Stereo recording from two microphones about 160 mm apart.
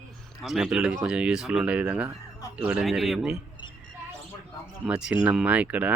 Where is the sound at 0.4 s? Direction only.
5° right (ahead or behind).